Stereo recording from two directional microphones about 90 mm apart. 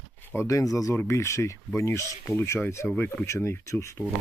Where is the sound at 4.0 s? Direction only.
10° right (ahead or behind).